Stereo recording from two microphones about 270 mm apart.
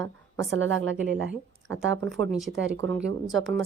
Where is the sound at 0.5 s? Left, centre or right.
Right.